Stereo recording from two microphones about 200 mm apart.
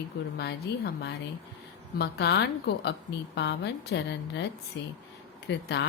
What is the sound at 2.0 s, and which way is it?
A woman's voice, 55° left (ahead or behind).